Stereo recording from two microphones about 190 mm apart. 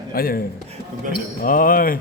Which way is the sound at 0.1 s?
50° left (ahead or behind).